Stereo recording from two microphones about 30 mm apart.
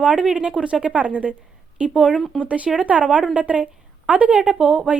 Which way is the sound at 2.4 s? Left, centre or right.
Right.